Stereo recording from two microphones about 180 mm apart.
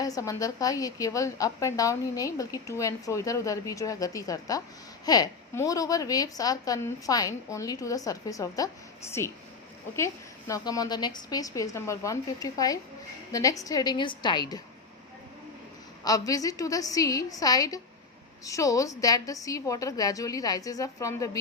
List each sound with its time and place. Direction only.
0.0 s a woman's voice: 20° left (ahead or behind)
16.0 s a woman's voice: 20° left (ahead or behind)